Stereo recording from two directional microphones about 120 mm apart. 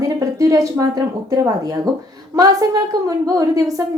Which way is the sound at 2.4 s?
30° right (ahead or behind).